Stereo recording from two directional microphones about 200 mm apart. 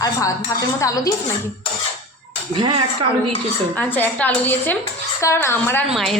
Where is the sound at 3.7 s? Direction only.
10° left (ahead or behind).